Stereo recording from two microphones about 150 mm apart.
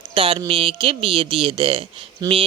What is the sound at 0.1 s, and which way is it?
Speech, 35° right (ahead or behind).